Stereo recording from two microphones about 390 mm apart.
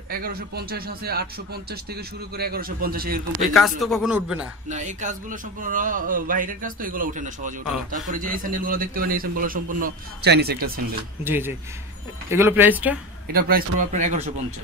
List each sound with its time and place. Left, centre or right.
0.1 s a man's voice: right
3.5 s speech: centre
4.6 s a man's voice: centre
11.2 s speech: centre
13.3 s a man's voice: right